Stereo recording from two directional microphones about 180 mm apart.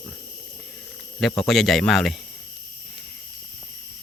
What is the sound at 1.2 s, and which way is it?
Speech, centre (ahead or behind).